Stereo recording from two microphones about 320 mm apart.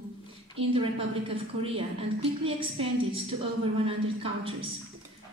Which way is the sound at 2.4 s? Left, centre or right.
Centre.